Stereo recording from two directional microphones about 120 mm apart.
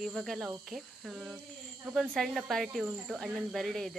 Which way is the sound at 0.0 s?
Centre (ahead or behind).